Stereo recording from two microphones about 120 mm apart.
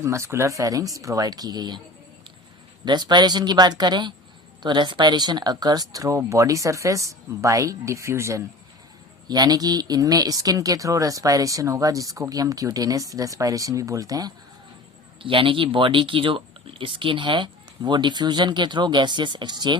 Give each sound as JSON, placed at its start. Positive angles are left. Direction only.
{"t": 0.0, "sound": "speech", "side_deg": -25}
{"t": 2.8, "sound": "speech", "side_deg": -35}
{"t": 15.2, "sound": "speech", "side_deg": -45}